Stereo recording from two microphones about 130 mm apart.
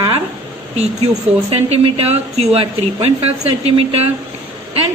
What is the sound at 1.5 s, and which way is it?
A woman's voice, 50° right (ahead or behind).